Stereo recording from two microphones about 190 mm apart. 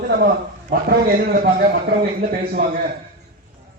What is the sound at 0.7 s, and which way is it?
A man's voice, 50° right (ahead or behind).